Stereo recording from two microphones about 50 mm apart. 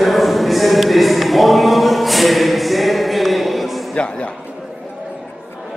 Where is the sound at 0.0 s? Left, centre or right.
Centre.